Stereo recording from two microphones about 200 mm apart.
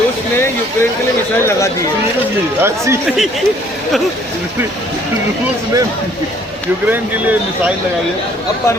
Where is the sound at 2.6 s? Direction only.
15° right (ahead or behind).